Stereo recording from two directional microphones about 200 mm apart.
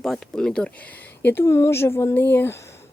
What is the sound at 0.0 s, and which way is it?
Speech, 5° left (ahead or behind).